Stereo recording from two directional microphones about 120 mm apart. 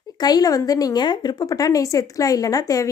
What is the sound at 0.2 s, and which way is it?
A woman's voice, 35° left (ahead or behind).